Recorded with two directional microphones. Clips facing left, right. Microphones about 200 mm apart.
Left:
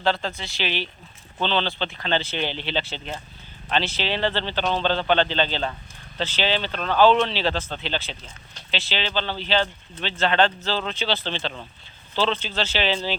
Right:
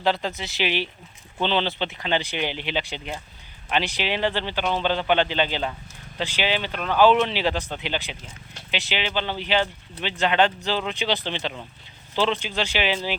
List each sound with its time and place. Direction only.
0.0 s speech: 15° right (ahead or behind)